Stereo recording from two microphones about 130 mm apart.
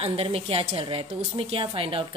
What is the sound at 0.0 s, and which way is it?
A woman's voice, 50° right (ahead or behind).